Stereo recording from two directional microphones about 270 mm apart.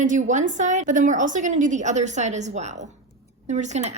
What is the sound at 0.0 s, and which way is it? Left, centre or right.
Speech, right.